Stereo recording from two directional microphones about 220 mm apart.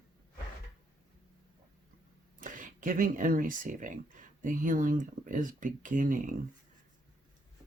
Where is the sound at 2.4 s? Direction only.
35° right (ahead or behind).